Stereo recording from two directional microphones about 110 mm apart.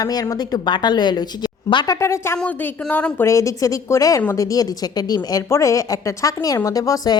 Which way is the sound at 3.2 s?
30° left (ahead or behind).